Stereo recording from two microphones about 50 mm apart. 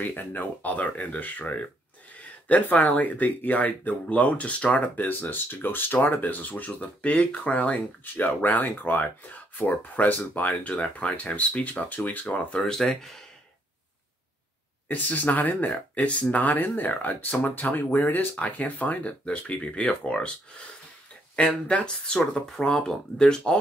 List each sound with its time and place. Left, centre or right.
0.0 s speech: left
8.0 s speech: left
10.5 s speech: left
12.5 s speech: centre
14.9 s speech: left
21.4 s speech: left